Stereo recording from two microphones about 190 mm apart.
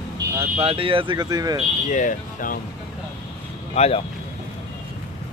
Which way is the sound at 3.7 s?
35° left (ahead or behind).